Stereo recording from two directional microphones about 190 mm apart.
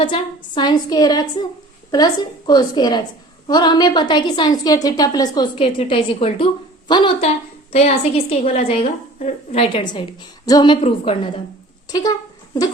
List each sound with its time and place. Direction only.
0.0 s a woman's voice: 25° left (ahead or behind)
2.5 s a woman's voice: 20° left (ahead or behind)
10.4 s a woman's voice: 20° left (ahead or behind)
10.8 s a woman's voice: 30° left (ahead or behind)